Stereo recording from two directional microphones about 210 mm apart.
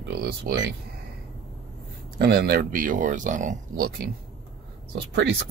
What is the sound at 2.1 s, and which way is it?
Speech, 50° right (ahead or behind).